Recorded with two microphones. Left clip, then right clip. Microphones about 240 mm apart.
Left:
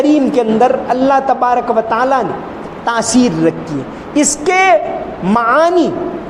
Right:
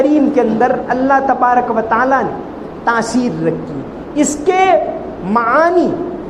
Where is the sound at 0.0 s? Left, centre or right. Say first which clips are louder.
Even; left.